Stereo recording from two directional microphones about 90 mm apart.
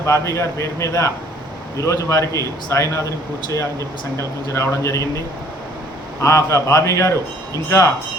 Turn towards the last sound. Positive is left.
turn(degrees=30)  # may be behind; listen again after turning